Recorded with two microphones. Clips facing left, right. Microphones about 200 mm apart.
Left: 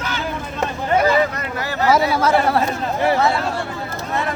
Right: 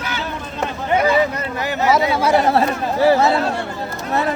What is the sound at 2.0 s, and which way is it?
Speech, 15° right (ahead or behind).